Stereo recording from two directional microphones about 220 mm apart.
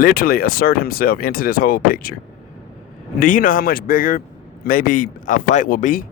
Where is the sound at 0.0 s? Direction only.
40° left (ahead or behind).